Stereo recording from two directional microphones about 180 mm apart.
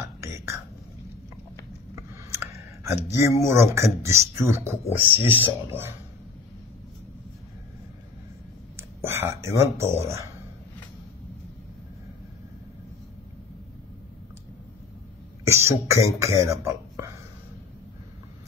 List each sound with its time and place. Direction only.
0.2 s whispering: 15° right (ahead or behind)
2.0 s speech: 15° right (ahead or behind)
8.7 s speech: 15° right (ahead or behind)
15.4 s speech: 15° right (ahead or behind)